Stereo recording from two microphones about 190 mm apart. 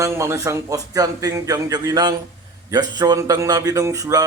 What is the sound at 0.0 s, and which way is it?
A man's voice, 15° right (ahead or behind).